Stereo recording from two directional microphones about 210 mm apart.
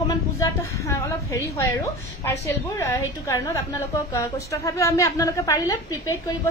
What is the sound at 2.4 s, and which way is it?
A woman's voice, 15° left (ahead or behind).